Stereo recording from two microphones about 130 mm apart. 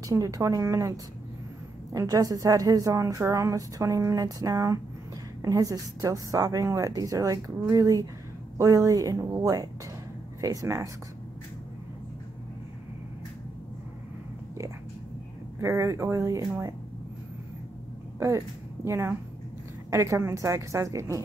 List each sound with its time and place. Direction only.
0.1 s a woman's voice: 25° right (ahead or behind)
15.6 s a woman's voice: 20° right (ahead or behind)
18.9 s a woman's voice: 20° right (ahead or behind)